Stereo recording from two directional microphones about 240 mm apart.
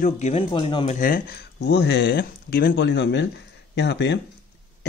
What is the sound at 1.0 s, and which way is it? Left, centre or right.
Speech, left.